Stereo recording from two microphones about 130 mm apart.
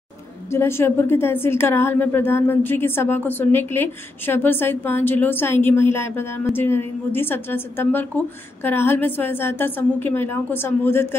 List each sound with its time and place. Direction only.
0.5 s a woman's voice: 20° left (ahead or behind)